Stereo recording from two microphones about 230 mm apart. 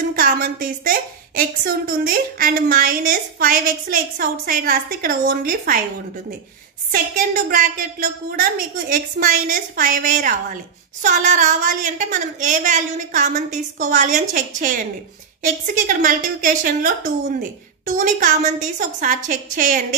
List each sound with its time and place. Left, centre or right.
0.1 s a woman's voice: right
6.9 s a woman's voice: right